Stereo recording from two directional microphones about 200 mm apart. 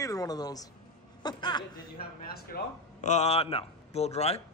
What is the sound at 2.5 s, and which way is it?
A man's voice, 35° left (ahead or behind).